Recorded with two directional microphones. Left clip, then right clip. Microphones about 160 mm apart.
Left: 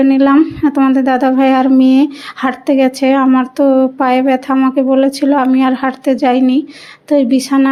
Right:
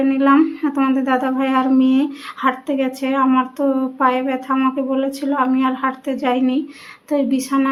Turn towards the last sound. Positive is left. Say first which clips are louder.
# left 6 dB
turn(degrees=35)  # may be behind; listen again after turning